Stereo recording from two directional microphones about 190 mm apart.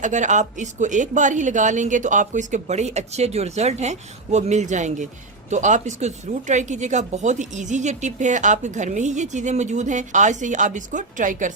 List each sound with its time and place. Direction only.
0.0 s speech: 40° right (ahead or behind)